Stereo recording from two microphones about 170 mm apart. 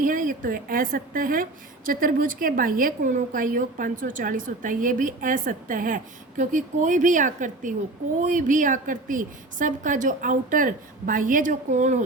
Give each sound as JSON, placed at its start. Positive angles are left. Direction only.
{"t": 0.0, "sound": "a woman's voice", "side_deg": -55}